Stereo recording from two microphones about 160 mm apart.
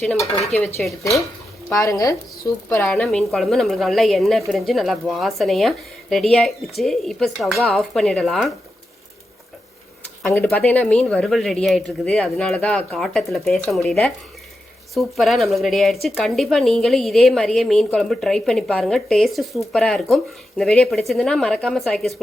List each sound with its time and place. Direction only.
0.5 s a woman's voice: centre (ahead or behind)
1.7 s speech: 20° left (ahead or behind)
2.9 s a woman's voice: 5° left (ahead or behind)
10.4 s a woman's voice: 5° left (ahead or behind)